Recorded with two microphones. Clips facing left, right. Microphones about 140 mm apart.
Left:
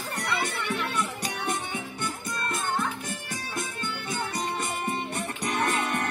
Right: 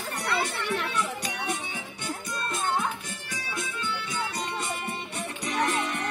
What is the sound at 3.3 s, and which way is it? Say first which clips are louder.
Music: right 3 dB; 50° left (ahead or behind).